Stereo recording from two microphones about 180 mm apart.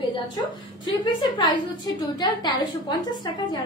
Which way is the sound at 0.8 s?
25° left (ahead or behind).